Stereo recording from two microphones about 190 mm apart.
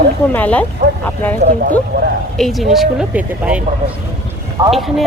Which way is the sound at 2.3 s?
Centre (ahead or behind).